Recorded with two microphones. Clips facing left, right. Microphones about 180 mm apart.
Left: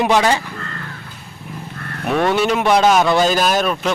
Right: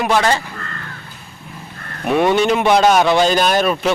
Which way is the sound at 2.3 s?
Centre (ahead or behind).